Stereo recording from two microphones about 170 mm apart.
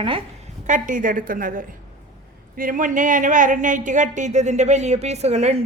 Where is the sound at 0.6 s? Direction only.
50° right (ahead or behind).